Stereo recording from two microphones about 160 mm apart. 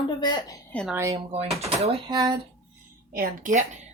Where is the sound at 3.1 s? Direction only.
55° right (ahead or behind).